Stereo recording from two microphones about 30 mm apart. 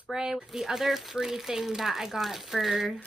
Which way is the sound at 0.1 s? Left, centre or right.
Right.